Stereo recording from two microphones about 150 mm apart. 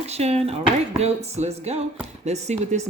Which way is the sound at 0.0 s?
45° right (ahead or behind).